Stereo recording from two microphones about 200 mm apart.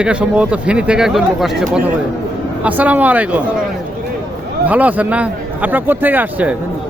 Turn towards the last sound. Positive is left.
turn(degrees=-10)  # may be behind; listen again after turning